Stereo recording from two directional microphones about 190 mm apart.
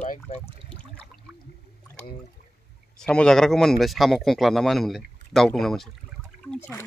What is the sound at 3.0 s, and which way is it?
Speech, 5° left (ahead or behind).